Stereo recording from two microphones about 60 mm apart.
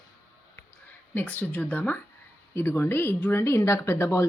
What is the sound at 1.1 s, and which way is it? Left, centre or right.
Speech, left.